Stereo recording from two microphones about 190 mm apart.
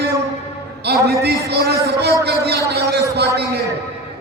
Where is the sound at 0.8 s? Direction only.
60° right (ahead or behind).